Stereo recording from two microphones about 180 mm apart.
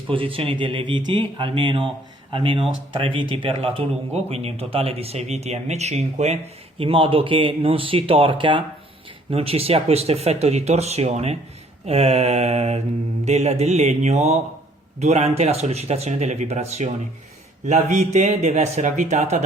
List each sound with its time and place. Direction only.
0.1 s speech: 30° right (ahead or behind)